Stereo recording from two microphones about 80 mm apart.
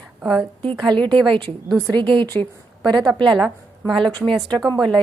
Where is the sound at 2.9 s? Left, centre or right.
Right.